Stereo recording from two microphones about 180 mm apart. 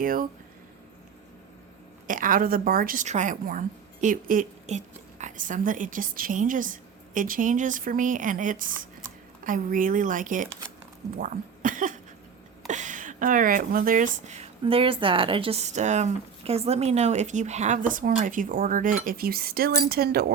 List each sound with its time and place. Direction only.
0.0 s speech: 50° right (ahead or behind)
2.0 s speech: 50° right (ahead or behind)
11.2 s cough: 45° right (ahead or behind)
12.6 s speech: 45° right (ahead or behind); by 20.2 s 60° right (ahead or behind)